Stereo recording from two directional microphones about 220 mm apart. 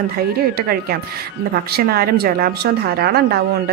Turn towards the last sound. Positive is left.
turn(degrees=-45)  # may be behind; listen again after turning